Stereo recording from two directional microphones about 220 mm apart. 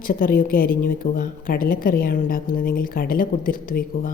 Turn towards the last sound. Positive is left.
turn(degrees=40)  # may be behind; listen again after turning